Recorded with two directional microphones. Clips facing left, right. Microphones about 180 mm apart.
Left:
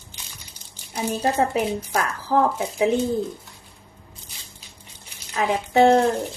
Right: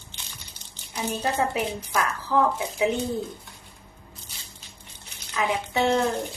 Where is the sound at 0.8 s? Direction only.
10° left (ahead or behind).